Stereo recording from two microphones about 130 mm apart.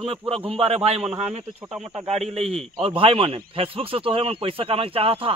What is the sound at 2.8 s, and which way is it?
Speech, 45° right (ahead or behind).